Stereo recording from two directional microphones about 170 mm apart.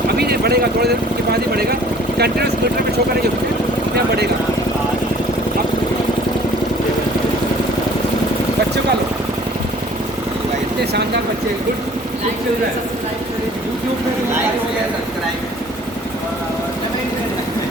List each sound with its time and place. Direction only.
0.2 s speech: 70° right (ahead or behind)
2.1 s speech: 70° right (ahead or behind)